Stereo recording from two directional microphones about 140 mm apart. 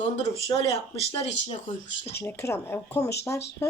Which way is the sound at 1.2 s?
45° left (ahead or behind).